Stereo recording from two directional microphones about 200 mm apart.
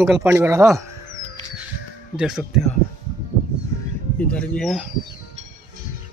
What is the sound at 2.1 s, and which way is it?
Speech, 5° right (ahead or behind).